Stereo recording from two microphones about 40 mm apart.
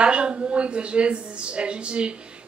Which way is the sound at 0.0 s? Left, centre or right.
Right.